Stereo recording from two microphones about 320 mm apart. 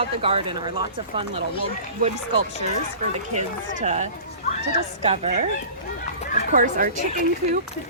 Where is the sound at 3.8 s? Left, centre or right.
Right.